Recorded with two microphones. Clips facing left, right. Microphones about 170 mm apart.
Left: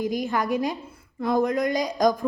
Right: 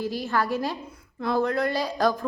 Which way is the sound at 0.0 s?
15° left (ahead or behind).